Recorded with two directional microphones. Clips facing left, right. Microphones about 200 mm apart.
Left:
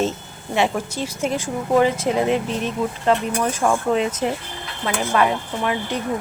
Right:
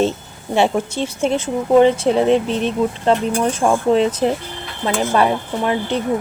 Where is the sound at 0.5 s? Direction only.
30° right (ahead or behind).